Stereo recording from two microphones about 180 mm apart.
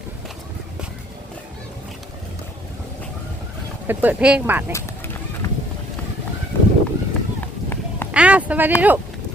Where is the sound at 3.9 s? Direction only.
10° right (ahead or behind).